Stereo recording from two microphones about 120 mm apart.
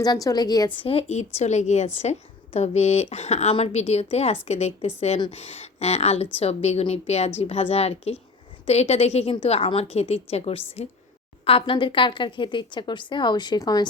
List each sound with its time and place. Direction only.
0.0 s a woman's voice: 30° left (ahead or behind)
0.8 s a woman's voice: 50° left (ahead or behind); by 13.8 s 30° left (ahead or behind)